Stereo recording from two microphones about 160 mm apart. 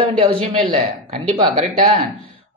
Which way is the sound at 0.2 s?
40° right (ahead or behind).